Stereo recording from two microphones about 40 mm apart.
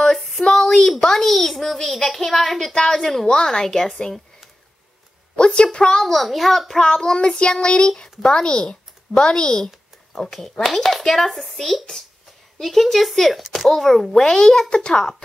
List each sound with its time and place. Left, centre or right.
0.4 s a child's voice: centre
5.3 s a woman's voice: left; by 6.2 s centre
6.2 s speech: centre
6.8 s child singing: centre
7.9 s speech: centre
14.8 s child singing: centre